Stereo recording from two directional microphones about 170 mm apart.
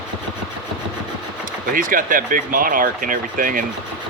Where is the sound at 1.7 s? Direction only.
55° right (ahead or behind).